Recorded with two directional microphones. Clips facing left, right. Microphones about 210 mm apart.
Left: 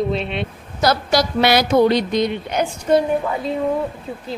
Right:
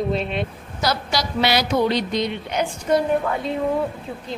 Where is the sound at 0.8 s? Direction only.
50° left (ahead or behind).